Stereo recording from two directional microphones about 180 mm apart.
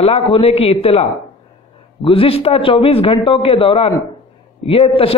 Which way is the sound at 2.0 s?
30° left (ahead or behind).